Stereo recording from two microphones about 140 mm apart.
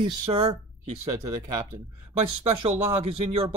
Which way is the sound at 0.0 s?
40° right (ahead or behind).